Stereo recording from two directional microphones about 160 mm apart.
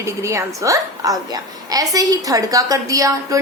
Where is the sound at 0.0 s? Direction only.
20° right (ahead or behind).